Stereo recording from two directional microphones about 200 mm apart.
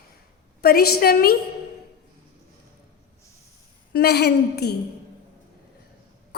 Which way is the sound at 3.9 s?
55° left (ahead or behind).